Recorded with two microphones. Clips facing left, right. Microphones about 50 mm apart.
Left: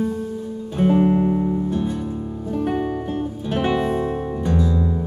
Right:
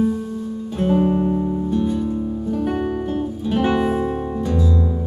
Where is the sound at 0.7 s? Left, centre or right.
Centre.